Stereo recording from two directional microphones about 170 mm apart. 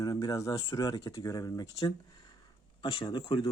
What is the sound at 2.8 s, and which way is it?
Speech, 30° left (ahead or behind).